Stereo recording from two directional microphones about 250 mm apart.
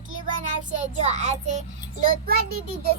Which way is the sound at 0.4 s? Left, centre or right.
Right.